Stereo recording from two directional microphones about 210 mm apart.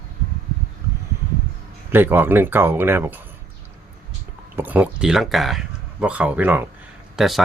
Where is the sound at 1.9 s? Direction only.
10° right (ahead or behind).